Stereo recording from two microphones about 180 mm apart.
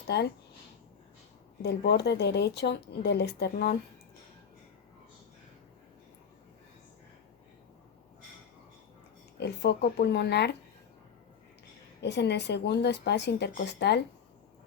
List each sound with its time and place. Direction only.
0.1 s speech: 70° left (ahead or behind)
1.6 s speech: 65° left (ahead or behind)
9.4 s speech: 65° left (ahead or behind)
12.0 s speech: 70° left (ahead or behind)